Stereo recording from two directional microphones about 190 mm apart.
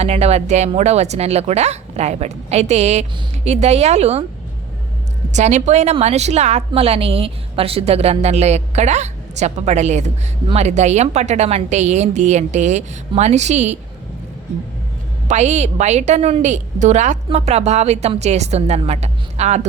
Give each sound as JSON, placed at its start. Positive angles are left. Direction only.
{"t": 0.0, "sound": "a woman's voice", "side_deg": -35}
{"t": 5.3, "sound": "a woman's voice", "side_deg": -40}
{"t": 15.3, "sound": "a woman's voice", "side_deg": -35}